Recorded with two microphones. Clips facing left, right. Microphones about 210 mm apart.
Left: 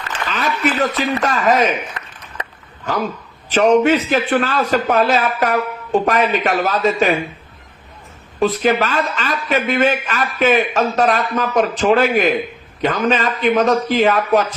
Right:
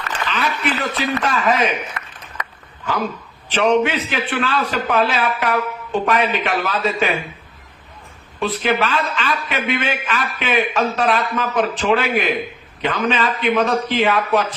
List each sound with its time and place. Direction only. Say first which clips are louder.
0.3 s a man's voice: left 3 dB; 40° left (ahead or behind)
3.5 s a man's voice: left 4 dB; 45° left (ahead or behind)
8.4 s a man's voice: left 4 dB; 40° left (ahead or behind)